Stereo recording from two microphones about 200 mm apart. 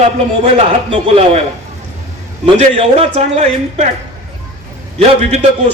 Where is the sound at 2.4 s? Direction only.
30° right (ahead or behind).